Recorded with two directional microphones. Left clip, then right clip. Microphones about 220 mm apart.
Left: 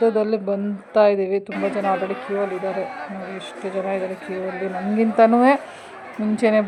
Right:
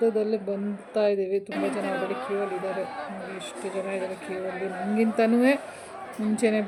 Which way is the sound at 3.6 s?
Centre (ahead or behind).